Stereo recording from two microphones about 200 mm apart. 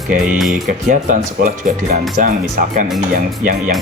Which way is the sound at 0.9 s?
40° right (ahead or behind).